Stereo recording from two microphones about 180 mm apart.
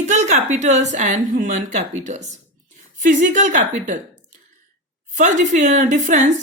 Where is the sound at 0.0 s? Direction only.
40° right (ahead or behind).